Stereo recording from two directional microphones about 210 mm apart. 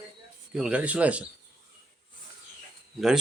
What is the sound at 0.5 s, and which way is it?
Speech, 5° right (ahead or behind).